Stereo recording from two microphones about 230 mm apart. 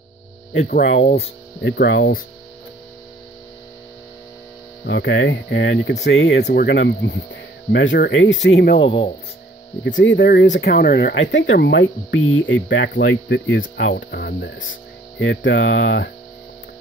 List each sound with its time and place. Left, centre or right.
0.6 s speech: left
4.8 s speech: left
9.8 s speech: left